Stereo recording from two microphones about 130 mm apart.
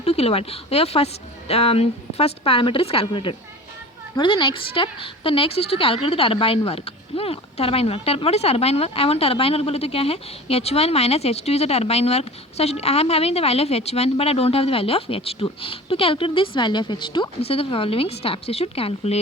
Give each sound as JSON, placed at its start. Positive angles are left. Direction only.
{"t": 0.0, "sound": "a woman's voice", "side_deg": 50}